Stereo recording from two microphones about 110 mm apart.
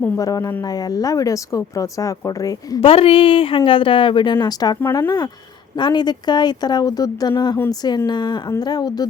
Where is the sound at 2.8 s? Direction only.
60° left (ahead or behind).